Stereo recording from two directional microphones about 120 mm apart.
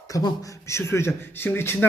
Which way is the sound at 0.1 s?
30° left (ahead or behind).